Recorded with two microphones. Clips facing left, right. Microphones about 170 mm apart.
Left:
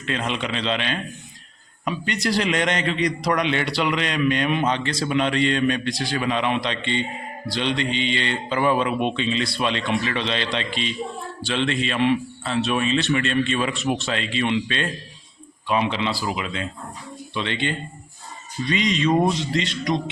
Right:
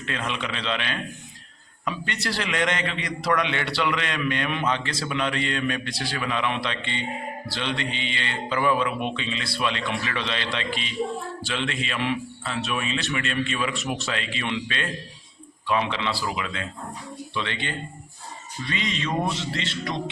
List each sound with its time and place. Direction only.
0.0 s a man's voice: 20° left (ahead or behind)